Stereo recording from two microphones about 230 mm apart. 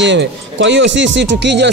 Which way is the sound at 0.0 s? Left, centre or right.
Right.